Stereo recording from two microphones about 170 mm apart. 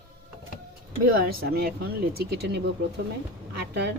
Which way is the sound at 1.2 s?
65° right (ahead or behind).